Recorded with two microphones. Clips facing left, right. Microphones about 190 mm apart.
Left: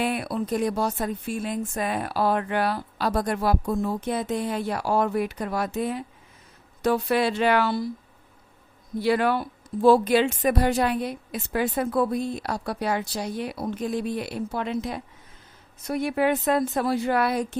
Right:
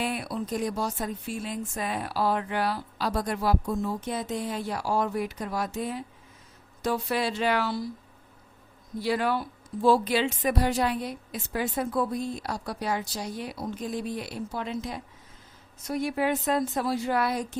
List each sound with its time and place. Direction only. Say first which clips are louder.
0.0 s a woman's voice: left 4 dB; 60° left (ahead or behind)
9.0 s a woman's voice: left 4 dB; 60° left (ahead or behind)